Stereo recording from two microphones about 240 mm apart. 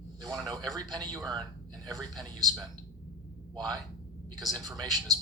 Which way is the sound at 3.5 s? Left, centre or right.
Centre.